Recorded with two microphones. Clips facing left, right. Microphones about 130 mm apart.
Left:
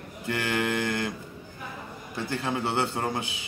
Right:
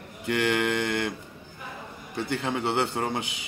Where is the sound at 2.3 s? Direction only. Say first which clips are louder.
Right 1 dB; 25° right (ahead or behind).